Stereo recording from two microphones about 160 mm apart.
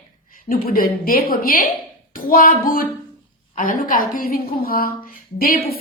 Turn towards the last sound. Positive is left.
turn(degrees=65)  # may be behind; listen again after turning